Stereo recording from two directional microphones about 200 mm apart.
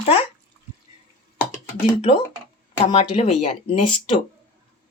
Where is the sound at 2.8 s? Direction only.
25° left (ahead or behind).